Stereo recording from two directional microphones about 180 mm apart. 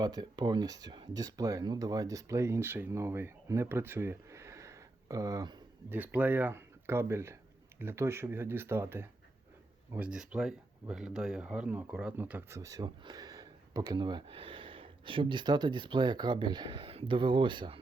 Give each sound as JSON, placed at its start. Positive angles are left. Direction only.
{"t": 0.0, "sound": "speech", "side_deg": -25}
{"t": 6.1, "sound": "speech", "side_deg": -10}